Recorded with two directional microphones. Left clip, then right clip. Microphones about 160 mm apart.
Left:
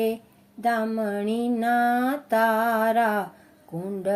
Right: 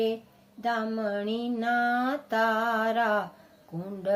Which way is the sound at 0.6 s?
20° left (ahead or behind).